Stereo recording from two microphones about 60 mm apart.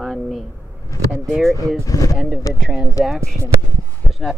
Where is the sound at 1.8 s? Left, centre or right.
Left.